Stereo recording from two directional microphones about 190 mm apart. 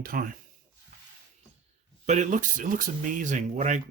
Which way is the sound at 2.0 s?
40° right (ahead or behind).